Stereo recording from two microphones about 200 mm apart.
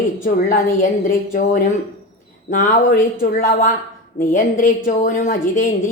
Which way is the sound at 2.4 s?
40° left (ahead or behind).